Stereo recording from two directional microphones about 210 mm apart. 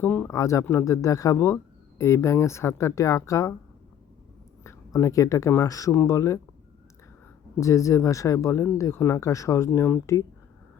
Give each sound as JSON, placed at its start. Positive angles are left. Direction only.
{"t": 0.0, "sound": "speech", "side_deg": 10}
{"t": 4.6, "sound": "speech", "side_deg": 10}
{"t": 7.6, "sound": "speech", "side_deg": 15}